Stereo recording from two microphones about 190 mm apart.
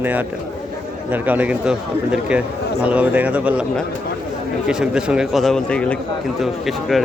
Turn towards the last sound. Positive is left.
turn(degrees=0)  # may be behind; listen again after turning